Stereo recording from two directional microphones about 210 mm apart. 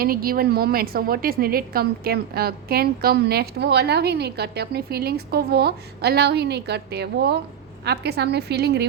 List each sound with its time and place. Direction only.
0.0 s a woman's voice: 45° right (ahead or behind)